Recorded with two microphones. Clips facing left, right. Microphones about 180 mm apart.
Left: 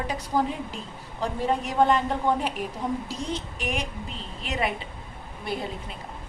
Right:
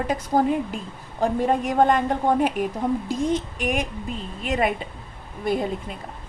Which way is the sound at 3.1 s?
50° right (ahead or behind).